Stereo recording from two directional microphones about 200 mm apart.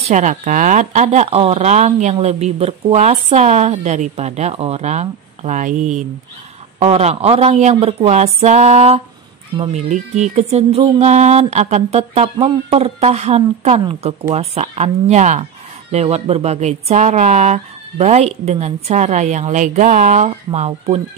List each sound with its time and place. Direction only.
0.1 s speech: 40° right (ahead or behind)